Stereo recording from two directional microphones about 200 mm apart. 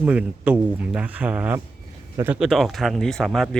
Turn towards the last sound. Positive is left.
turn(degrees=0)  # may be behind; listen again after turning